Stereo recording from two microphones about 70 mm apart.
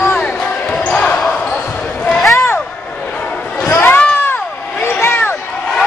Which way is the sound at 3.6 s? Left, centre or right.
Left.